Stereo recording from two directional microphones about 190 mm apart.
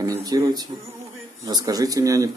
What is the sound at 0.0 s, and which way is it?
Speech, 20° right (ahead or behind).